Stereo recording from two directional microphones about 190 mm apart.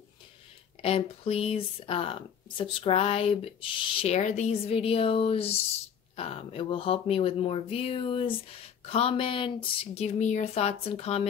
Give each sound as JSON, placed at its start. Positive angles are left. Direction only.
{"t": 0.8, "sound": "speech", "side_deg": 30}